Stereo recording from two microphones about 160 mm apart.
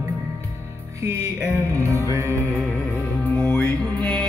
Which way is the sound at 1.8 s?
20° right (ahead or behind).